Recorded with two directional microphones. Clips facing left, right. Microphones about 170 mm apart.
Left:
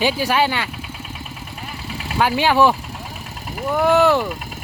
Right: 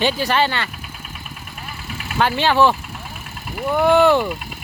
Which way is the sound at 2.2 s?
10° left (ahead or behind).